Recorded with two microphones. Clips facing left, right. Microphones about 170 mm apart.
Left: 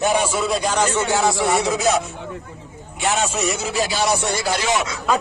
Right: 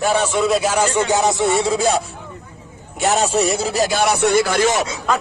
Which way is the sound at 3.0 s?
40° right (ahead or behind).